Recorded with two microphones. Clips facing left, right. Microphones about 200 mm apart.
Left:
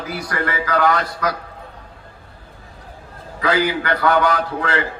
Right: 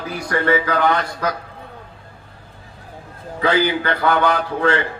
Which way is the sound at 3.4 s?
30° right (ahead or behind).